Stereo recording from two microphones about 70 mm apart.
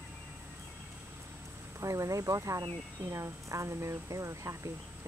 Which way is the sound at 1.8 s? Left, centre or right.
Right.